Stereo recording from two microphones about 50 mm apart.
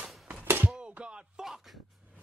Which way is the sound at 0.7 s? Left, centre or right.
Right.